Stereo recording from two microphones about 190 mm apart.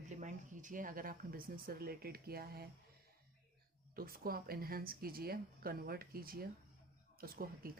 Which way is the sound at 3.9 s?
50° right (ahead or behind).